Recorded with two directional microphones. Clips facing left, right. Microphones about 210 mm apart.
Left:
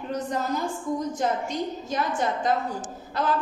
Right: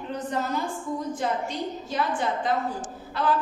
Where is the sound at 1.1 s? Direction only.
45° left (ahead or behind).